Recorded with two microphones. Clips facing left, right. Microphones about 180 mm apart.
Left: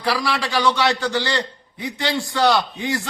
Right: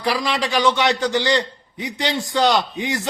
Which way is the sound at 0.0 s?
20° right (ahead or behind).